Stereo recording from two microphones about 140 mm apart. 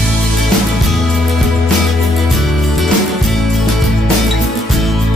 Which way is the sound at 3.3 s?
Centre (ahead or behind).